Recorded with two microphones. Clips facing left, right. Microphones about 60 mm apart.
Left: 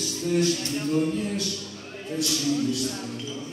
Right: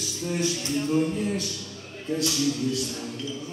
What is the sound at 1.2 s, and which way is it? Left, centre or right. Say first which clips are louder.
Speech: right 1 dB; right.